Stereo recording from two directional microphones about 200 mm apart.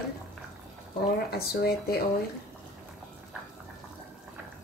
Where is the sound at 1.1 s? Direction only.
50° left (ahead or behind).